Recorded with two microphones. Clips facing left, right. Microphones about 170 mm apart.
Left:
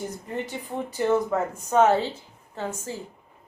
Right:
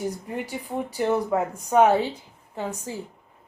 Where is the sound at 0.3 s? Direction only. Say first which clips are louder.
Right 1 dB; 10° right (ahead or behind).